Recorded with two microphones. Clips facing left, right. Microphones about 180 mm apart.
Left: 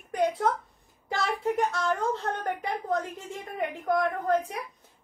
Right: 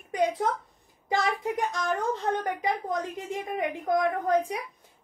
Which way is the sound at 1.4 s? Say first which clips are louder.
Left 2 dB; 15° right (ahead or behind).